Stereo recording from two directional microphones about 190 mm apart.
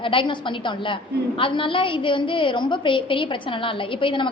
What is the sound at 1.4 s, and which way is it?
A woman's voice, 25° left (ahead or behind).